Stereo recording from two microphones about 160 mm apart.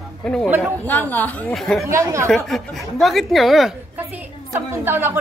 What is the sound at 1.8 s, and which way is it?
Speech, 20° right (ahead or behind).